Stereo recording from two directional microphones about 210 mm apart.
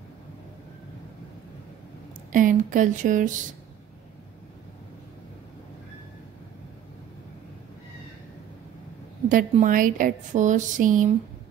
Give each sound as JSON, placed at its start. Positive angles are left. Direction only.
{"t": 2.3, "sound": "speech", "side_deg": -40}
{"t": 9.3, "sound": "speech", "side_deg": -40}